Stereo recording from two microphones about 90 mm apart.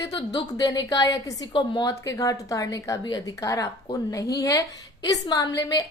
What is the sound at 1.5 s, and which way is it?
Speech, 60° left (ahead or behind).